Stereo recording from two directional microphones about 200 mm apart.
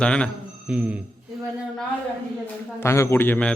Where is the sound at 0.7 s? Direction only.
5° right (ahead or behind).